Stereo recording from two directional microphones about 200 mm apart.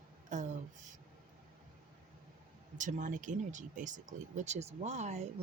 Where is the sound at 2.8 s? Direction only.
40° right (ahead or behind).